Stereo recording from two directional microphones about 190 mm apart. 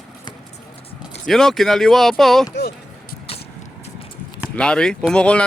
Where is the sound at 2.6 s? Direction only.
55° left (ahead or behind).